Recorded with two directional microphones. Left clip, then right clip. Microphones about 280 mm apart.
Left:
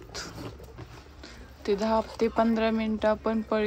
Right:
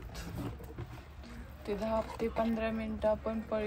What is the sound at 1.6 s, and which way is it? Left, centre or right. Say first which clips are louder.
Speech: left 8 dB; left.